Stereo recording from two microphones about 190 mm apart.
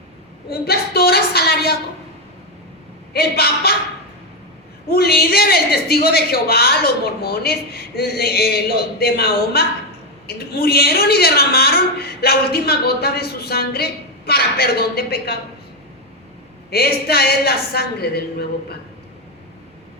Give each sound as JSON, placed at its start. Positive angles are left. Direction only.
{"t": 0.5, "sound": "a woman's voice", "side_deg": 55}
{"t": 3.1, "sound": "a woman's voice", "side_deg": 55}
{"t": 4.9, "sound": "a woman's voice", "side_deg": 55}
{"t": 16.6, "sound": "a woman's voice", "side_deg": 55}